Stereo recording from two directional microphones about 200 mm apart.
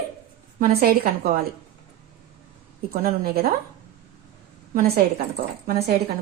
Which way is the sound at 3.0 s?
50° right (ahead or behind).